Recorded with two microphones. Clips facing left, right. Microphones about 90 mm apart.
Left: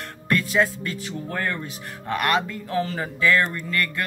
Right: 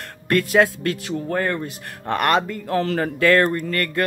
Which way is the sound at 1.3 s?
40° right (ahead or behind).